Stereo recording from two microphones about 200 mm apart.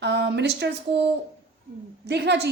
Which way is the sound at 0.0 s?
60° right (ahead or behind).